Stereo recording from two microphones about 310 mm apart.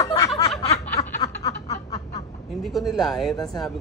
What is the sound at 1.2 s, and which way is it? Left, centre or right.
Snicker, centre.